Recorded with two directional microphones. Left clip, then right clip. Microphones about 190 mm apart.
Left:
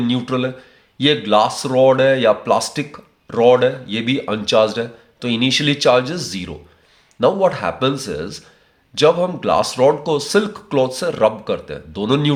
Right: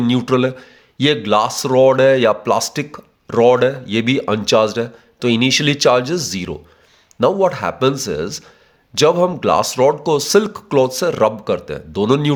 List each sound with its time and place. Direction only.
0.0 s speech: 45° right (ahead or behind)